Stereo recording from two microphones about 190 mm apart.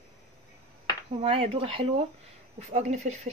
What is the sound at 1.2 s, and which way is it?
Speech, 30° right (ahead or behind).